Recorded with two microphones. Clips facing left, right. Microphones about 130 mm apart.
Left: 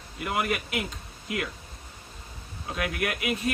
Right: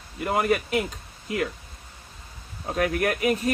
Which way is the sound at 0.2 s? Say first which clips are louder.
Right 5 dB; 35° right (ahead or behind).